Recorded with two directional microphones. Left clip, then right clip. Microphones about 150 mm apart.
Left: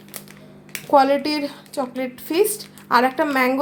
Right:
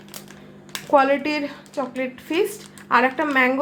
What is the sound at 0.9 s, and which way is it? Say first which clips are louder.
A woman's voice: left 2 dB; 35° left (ahead or behind).